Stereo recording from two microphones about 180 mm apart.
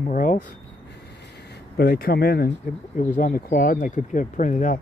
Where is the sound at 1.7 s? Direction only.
55° left (ahead or behind).